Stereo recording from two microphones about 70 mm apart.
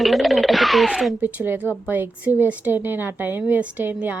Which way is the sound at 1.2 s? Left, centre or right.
Right.